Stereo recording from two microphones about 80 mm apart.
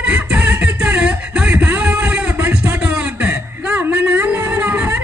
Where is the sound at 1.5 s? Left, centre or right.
Centre.